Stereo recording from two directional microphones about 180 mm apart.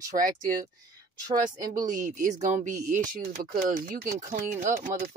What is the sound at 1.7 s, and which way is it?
Speech, 45° right (ahead or behind).